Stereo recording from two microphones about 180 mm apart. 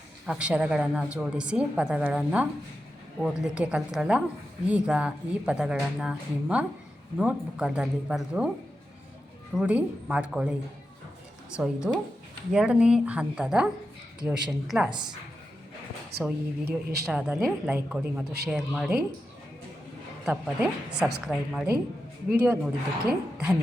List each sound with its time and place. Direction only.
0.3 s a woman's voice: 5° right (ahead or behind)
9.6 s a woman's voice: 5° right (ahead or behind)
11.5 s a woman's voice: 5° right (ahead or behind)
16.1 s speech: 60° right (ahead or behind)
17.1 s a woman's voice: 5° right (ahead or behind)
20.2 s a woman's voice: 5° right (ahead or behind)